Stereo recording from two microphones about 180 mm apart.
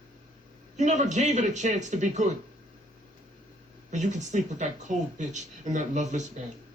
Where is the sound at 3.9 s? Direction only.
40° right (ahead or behind).